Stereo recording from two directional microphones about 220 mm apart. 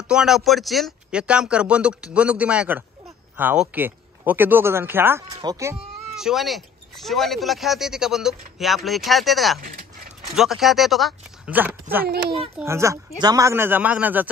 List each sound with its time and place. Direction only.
0.1 s speech: centre (ahead or behind)
6.1 s speech: centre (ahead or behind)
9.6 s a sound: 40° right (ahead or behind)
10.3 s speech: centre (ahead or behind)